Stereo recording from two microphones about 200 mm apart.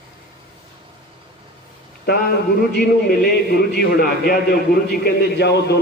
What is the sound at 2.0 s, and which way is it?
A man's voice, 50° left (ahead or behind).